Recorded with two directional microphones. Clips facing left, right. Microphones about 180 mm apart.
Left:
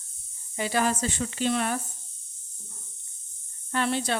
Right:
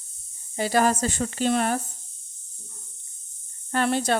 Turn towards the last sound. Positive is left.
turn(degrees=-45)  # may be behind; listen again after turning